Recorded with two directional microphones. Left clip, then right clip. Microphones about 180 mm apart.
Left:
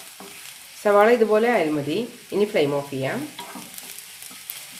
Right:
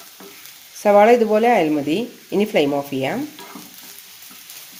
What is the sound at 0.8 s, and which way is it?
Speech, 25° right (ahead or behind).